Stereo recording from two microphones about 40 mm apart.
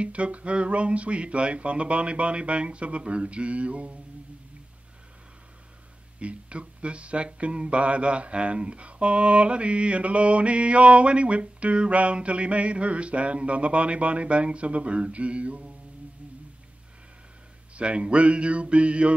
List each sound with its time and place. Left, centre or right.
0.0 s speech: right
6.1 s speech: right
17.7 s speech: right